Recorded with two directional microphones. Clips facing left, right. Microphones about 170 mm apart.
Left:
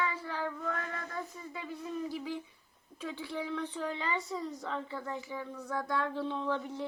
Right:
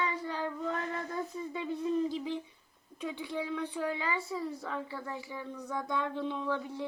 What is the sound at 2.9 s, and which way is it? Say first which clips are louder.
A woman's voice: right 2 dB; 15° right (ahead or behind).